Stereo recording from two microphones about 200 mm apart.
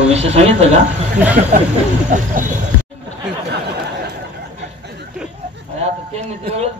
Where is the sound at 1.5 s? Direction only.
45° right (ahead or behind).